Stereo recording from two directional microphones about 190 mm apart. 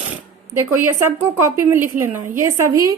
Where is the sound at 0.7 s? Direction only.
10° right (ahead or behind).